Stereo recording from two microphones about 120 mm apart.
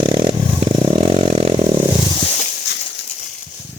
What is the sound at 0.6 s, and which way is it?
Vehicle, 55° right (ahead or behind).